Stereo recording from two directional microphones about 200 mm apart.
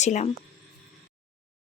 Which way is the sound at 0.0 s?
35° left (ahead or behind).